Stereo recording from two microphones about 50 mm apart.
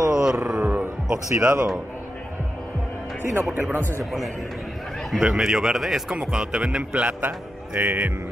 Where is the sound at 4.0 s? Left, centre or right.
Centre.